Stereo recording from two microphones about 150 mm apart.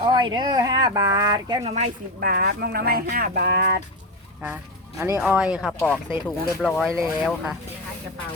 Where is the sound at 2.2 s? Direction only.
85° right.